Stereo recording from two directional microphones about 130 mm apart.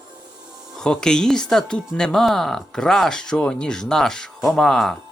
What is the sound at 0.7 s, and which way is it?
Speech, 5° left (ahead or behind).